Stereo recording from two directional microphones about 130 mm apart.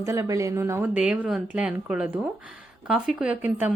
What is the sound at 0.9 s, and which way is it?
Speech, 10° right (ahead or behind).